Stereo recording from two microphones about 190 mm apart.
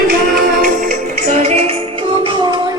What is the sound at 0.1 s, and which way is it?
Music, 50° right (ahead or behind).